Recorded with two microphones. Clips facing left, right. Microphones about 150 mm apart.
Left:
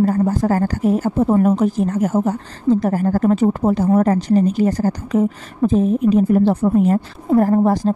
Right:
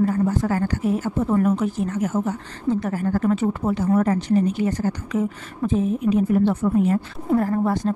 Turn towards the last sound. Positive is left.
turn(degrees=35)  # may be behind; listen again after turning